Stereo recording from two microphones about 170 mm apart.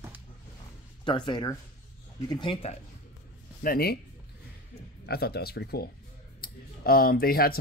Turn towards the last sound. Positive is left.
turn(degrees=60)  # may be behind; listen again after turning